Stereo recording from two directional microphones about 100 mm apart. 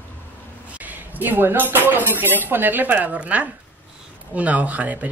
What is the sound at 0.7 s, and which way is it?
Speech, 15° right (ahead or behind).